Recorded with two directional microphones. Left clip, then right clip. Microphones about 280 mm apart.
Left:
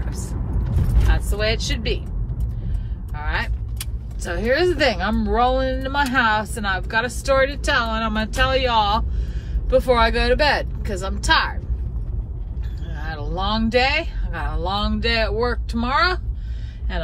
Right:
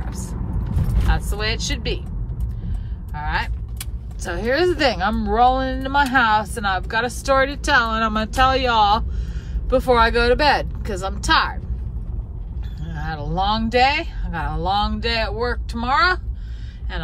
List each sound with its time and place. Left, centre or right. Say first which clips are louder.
0.1 s vehicle: even; centre
1.1 s speech: left 2 dB; centre
3.2 s speech: right 2 dB; centre
12.8 s speech: right 3 dB; centre